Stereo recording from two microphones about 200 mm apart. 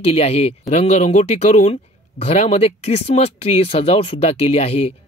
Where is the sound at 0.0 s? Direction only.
30° left (ahead or behind).